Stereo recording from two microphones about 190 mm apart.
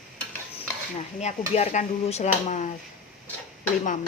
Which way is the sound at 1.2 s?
35° left (ahead or behind).